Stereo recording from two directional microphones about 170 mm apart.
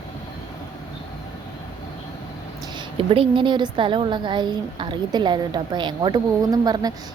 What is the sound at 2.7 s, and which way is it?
A woman's voice, 30° right (ahead or behind).